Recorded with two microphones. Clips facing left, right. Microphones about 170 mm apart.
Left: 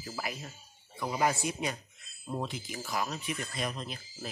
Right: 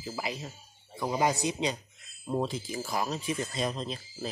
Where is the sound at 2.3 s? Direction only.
30° right (ahead or behind).